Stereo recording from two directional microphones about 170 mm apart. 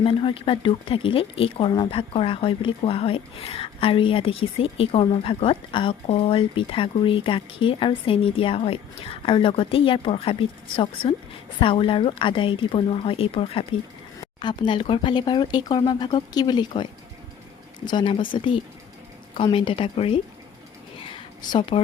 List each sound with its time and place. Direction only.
0.0 s speech: 30° left (ahead or behind)
11.6 s speech: 30° left (ahead or behind)
21.0 s a sound: 30° left (ahead or behind)